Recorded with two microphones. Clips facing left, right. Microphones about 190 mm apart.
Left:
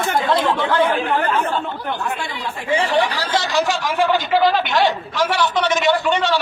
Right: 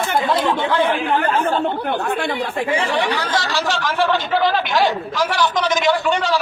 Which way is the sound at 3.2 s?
25° left (ahead or behind).